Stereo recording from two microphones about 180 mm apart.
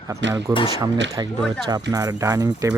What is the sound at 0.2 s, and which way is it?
Speech, 80° right.